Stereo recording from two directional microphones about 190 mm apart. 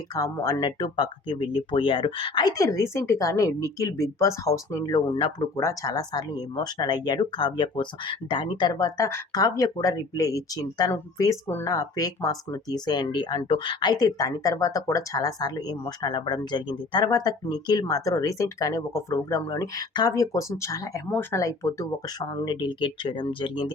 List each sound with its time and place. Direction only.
0.1 s speech: 20° left (ahead or behind)